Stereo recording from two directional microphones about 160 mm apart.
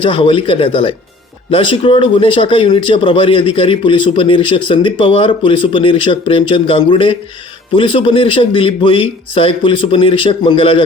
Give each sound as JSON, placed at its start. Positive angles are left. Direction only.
{"t": 0.0, "sound": "speech", "side_deg": 35}